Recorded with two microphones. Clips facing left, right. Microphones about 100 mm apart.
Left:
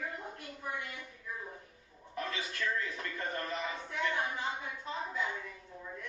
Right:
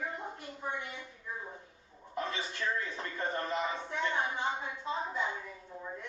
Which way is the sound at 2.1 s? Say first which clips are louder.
Right 2 dB; 25° right (ahead or behind).